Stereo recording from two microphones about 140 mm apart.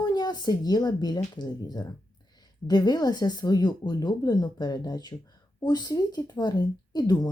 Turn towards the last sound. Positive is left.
turn(degrees=30)  # may be behind; listen again after turning